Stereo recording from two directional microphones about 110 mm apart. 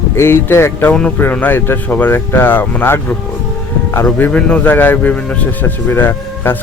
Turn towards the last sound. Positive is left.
turn(degrees=20)  # may be behind; listen again after turning